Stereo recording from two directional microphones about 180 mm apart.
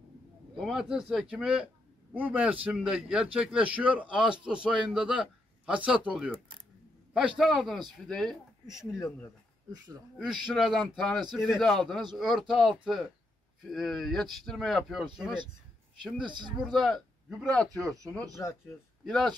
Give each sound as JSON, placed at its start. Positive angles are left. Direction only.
{"t": 0.6, "sound": "a man's voice", "side_deg": 0}
{"t": 8.7, "sound": "speech", "side_deg": 15}
{"t": 10.1, "sound": "speech", "side_deg": 0}
{"t": 16.0, "sound": "speech", "side_deg": -25}
{"t": 16.8, "sound": "speech", "side_deg": 0}